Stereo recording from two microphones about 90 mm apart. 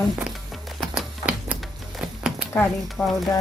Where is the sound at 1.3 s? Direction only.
15° right (ahead or behind).